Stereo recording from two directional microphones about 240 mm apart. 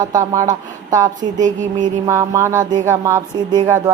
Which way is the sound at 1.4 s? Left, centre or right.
Right.